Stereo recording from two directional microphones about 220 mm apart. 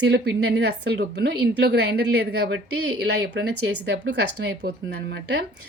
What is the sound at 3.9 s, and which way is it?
A woman's voice, 50° right (ahead or behind).